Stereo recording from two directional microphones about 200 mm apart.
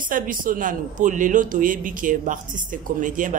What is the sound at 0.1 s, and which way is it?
Speech, 45° right (ahead or behind).